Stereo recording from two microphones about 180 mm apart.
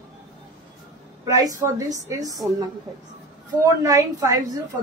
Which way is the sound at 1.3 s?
20° right (ahead or behind).